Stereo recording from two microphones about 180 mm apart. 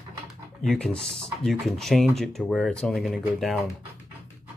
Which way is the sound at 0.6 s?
5° left (ahead or behind).